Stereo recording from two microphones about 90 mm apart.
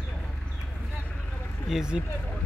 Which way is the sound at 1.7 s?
5° right (ahead or behind).